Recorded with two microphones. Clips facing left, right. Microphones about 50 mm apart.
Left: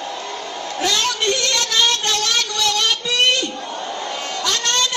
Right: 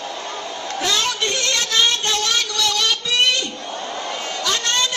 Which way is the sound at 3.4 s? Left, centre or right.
Left.